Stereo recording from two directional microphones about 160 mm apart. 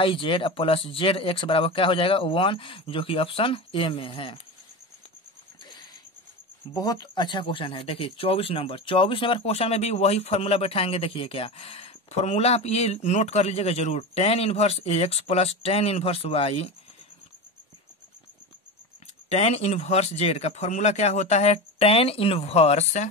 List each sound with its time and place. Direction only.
0.0 s speech: 35° left (ahead or behind)
6.7 s speech: 25° left (ahead or behind); by 16.7 s 40° left (ahead or behind)
19.2 s speech: 40° left (ahead or behind)